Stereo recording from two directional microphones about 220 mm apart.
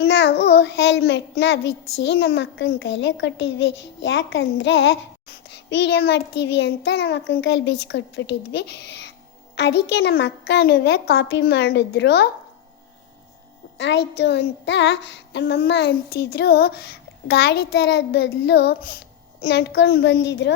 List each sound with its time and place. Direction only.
0.0 s child singing: 50° left (ahead or behind)
2.0 s speech: 50° left (ahead or behind)
5.5 s child singing: 50° left (ahead or behind)
13.7 s child singing: 55° left (ahead or behind)